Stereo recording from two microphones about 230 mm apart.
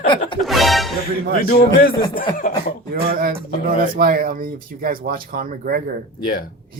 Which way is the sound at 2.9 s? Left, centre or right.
Right.